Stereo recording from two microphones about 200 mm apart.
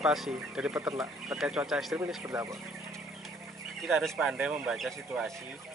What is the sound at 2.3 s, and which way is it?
Speech, 15° right (ahead or behind).